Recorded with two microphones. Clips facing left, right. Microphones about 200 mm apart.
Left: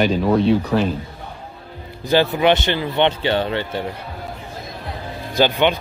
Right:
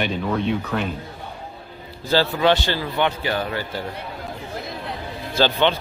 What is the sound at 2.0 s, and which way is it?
Speech, 20° left (ahead or behind).